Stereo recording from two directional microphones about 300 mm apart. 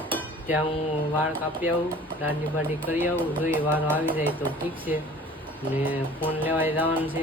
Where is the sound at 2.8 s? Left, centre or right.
Centre.